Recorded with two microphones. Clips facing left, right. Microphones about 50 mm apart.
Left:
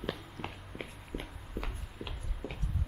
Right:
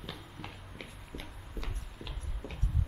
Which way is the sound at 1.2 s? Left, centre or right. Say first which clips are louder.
Left 3 dB; centre.